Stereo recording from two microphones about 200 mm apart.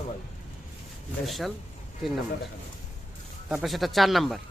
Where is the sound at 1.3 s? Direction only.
Centre (ahead or behind).